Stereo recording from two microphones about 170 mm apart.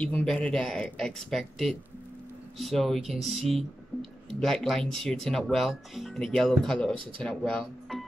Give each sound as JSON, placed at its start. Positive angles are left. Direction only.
{"t": 0.0, "sound": "speech", "side_deg": 5}
{"t": 7.0, "sound": "speech", "side_deg": -30}
{"t": 7.2, "sound": "speech", "side_deg": 5}